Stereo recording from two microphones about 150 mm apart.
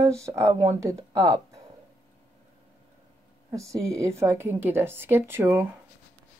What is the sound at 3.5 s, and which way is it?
Speech, 20° right (ahead or behind).